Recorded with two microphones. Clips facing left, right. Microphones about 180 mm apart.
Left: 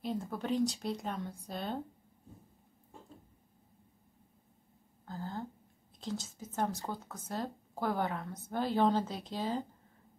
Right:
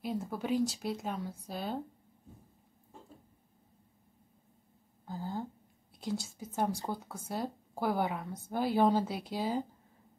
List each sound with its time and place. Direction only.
0.0 s speech: 5° right (ahead or behind)
5.0 s speech: 10° right (ahead or behind)